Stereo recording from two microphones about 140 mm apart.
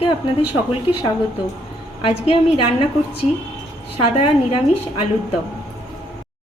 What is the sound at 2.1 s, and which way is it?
Speech, 40° left (ahead or behind).